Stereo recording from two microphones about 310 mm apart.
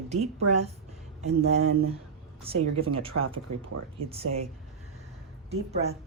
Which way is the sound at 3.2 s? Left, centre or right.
Right.